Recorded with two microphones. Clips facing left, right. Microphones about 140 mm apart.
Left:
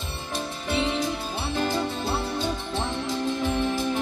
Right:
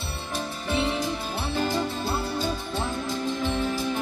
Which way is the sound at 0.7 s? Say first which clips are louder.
Even; 15° left (ahead or behind).